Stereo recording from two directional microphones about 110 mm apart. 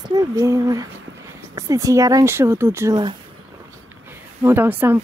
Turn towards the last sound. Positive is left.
turn(degrees=-20)  # may be behind; listen again after turning